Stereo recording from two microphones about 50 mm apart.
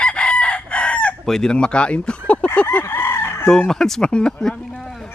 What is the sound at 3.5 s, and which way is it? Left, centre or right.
Chicken, centre.